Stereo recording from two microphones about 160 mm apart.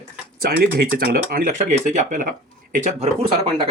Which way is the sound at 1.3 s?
60° right (ahead or behind).